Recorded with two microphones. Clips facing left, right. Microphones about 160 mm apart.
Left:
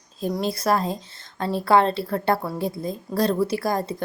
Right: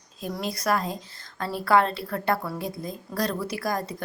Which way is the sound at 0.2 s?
30° left (ahead or behind).